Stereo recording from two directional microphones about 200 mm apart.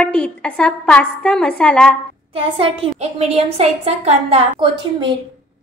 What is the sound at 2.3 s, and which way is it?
A woman's voice, 25° right (ahead or behind).